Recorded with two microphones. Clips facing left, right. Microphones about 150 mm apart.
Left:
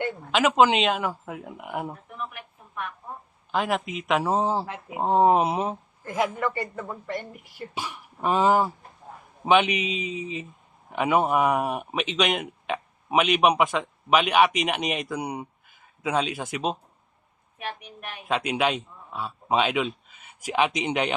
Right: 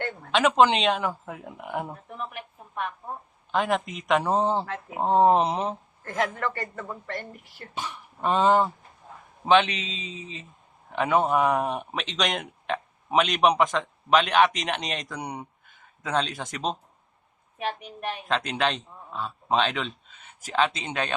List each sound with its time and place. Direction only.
0.0 s speech: 5° left (ahead or behind)
3.5 s speech: 5° left (ahead or behind)
17.6 s a woman's voice: 30° right (ahead or behind)
18.3 s a man's voice: 10° left (ahead or behind)